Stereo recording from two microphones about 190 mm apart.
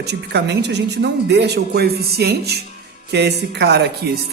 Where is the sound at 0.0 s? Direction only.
60° right (ahead or behind).